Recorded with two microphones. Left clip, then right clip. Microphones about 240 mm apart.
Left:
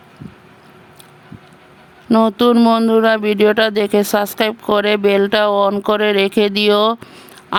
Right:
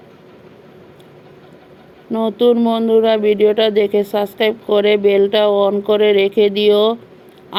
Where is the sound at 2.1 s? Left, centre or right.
Left.